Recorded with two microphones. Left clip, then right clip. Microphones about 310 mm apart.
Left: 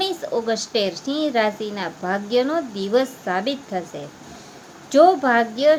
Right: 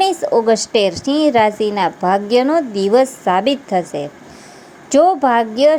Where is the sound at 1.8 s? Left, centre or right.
Right.